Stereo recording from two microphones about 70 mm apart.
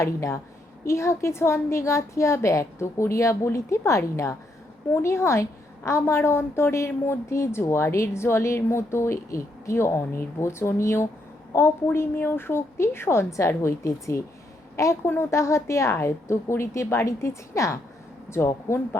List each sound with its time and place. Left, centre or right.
0.0 s a woman's voice: left
15.0 s a woman's voice: left